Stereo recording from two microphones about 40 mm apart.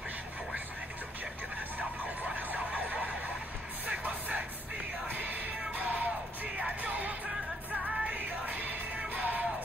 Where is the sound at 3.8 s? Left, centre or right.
Right.